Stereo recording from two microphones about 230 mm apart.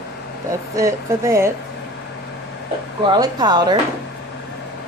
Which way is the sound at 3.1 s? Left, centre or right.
Centre.